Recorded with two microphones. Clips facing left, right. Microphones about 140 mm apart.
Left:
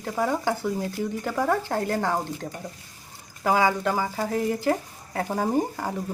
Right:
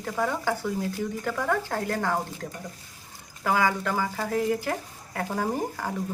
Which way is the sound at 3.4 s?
20° left (ahead or behind).